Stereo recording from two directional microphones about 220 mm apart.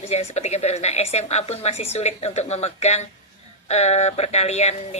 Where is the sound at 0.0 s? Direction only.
30° left (ahead or behind).